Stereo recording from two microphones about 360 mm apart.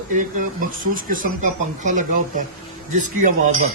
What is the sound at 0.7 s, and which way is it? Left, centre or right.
Speech, right.